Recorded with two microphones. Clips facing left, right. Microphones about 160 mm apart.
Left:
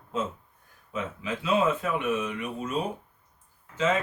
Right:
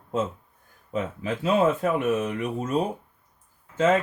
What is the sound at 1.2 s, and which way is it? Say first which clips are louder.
Speech: right 3 dB; 45° right (ahead or behind).